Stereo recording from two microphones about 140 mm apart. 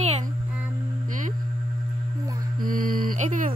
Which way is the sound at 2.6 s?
85° right.